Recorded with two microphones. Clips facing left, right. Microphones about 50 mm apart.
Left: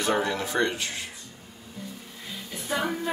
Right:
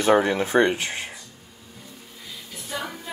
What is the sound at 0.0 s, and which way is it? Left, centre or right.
Speech, right.